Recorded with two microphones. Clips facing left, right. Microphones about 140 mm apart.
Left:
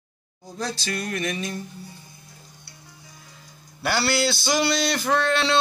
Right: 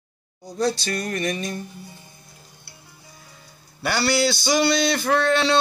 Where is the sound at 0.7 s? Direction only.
Centre (ahead or behind).